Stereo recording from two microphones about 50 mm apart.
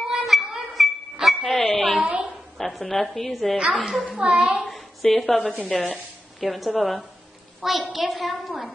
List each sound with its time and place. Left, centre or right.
0.0 s music: centre
2.0 s a sound: right
2.5 s a child's voice: centre
3.5 s a woman's voice: centre
4.6 s a sound: centre
5.7 s a child's voice: centre